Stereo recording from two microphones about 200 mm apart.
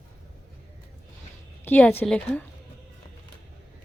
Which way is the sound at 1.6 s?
10° left (ahead or behind).